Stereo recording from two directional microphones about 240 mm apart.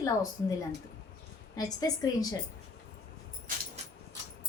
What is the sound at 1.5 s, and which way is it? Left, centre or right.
Speech, centre.